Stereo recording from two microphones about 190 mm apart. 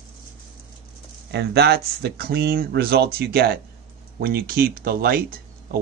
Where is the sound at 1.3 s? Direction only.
60° right (ahead or behind).